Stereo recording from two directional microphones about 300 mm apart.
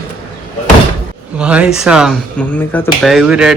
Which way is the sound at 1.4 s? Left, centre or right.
Centre.